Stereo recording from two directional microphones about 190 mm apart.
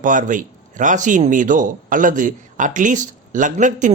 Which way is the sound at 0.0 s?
45° right (ahead or behind).